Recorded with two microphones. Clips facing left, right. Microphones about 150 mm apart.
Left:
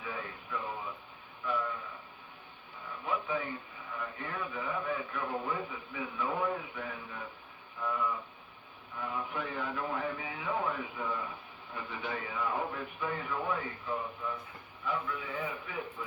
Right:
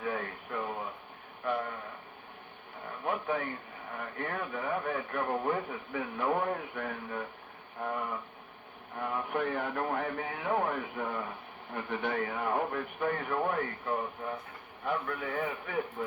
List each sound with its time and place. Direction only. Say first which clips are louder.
0.0 s radio: right 6 dB; 55° right (ahead or behind)
1.5 s a sound: right 2 dB; 60° right (ahead or behind)
3.1 s radio: right 2 dB; 55° right (ahead or behind)
3.9 s a man's voice: right 3 dB; 60° right (ahead or behind)